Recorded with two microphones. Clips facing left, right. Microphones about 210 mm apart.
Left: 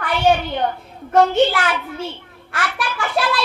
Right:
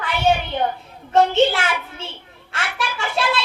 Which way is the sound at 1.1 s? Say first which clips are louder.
Left 1 dB; 25° right (ahead or behind).